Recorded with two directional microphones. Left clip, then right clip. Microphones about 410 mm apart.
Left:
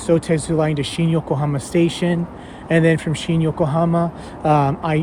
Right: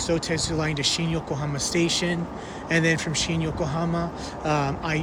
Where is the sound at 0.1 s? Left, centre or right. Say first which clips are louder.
Left 9 dB; centre.